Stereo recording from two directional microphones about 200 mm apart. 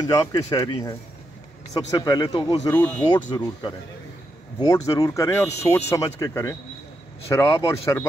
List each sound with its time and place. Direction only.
0.0 s speech: 15° left (ahead or behind)